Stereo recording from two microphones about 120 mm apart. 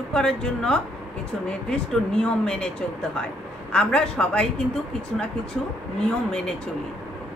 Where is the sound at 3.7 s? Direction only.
10° left (ahead or behind).